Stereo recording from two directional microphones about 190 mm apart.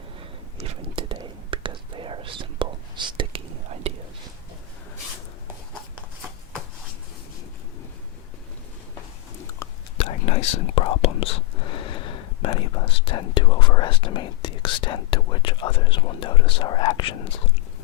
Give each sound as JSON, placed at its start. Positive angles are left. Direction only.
{"t": 0.6, "sound": "whispering", "side_deg": -30}
{"t": 9.6, "sound": "whispering", "side_deg": 15}
{"t": 10.0, "sound": "whispering", "side_deg": 30}